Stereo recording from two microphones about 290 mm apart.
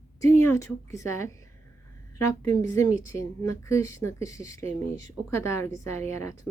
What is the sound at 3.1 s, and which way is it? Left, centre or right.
Speech, centre.